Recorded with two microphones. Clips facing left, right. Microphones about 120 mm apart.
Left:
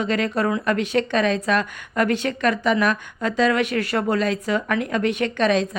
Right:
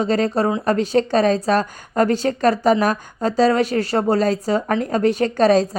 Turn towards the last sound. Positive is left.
turn(degrees=-35)  # may be behind; listen again after turning